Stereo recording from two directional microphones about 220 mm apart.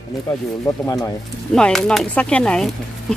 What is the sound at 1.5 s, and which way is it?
Speech, 5° left (ahead or behind).